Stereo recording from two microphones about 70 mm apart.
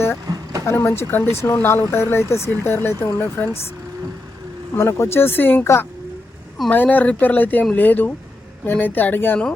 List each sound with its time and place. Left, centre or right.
0.3 s a sound: right
0.6 s speech: left
4.8 s speech: left
6.7 s speech: left